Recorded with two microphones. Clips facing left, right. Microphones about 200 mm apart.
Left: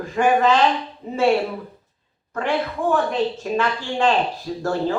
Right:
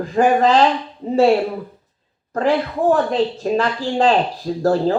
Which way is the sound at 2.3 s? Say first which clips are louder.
Right 5 dB; 35° right (ahead or behind).